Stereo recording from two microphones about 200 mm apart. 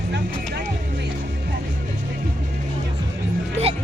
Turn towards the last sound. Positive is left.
turn(degrees=-30)  # may be behind; listen again after turning